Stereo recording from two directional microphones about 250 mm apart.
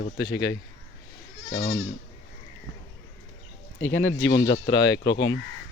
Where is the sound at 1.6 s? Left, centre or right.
Left.